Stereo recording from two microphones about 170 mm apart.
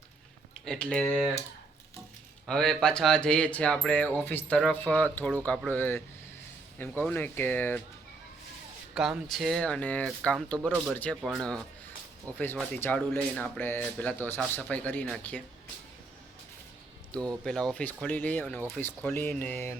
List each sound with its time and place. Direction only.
0.5 s speech: 5° left (ahead or behind)
2.5 s speech: 5° left (ahead or behind)
9.0 s speech: centre (ahead or behind)
17.4 s speech: 5° left (ahead or behind)